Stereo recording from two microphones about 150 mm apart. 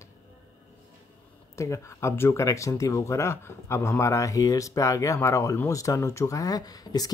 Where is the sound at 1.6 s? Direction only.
20° left (ahead or behind).